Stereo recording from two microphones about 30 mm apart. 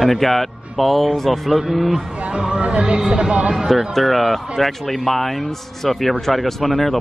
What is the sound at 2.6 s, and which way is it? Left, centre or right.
Speech, right.